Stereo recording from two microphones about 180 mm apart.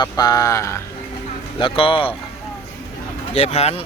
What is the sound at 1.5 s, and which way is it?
Speech, 30° left (ahead or behind).